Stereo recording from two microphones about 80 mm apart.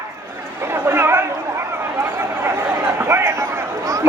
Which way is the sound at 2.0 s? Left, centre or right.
Right.